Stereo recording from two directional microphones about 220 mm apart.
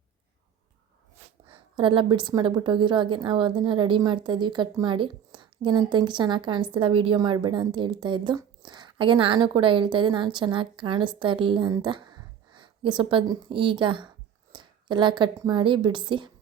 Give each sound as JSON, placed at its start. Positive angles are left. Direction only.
{"t": 1.5, "sound": "a woman's voice", "side_deg": -25}